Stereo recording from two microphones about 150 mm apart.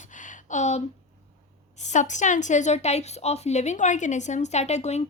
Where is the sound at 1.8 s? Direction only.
55° left (ahead or behind).